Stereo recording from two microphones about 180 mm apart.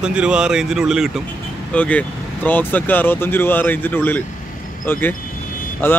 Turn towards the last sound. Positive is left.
turn(degrees=10)  # may be behind; listen again after turning